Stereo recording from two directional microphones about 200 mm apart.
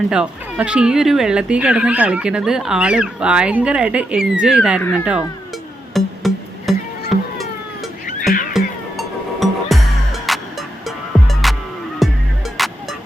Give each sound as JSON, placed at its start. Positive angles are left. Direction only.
{"t": 0.1, "sound": "speech", "side_deg": -5}
{"t": 5.9, "sound": "music", "side_deg": 0}
{"t": 7.1, "sound": "a sound", "side_deg": 0}
{"t": 8.3, "sound": "cat", "side_deg": 45}
{"t": 8.5, "sound": "music", "side_deg": 0}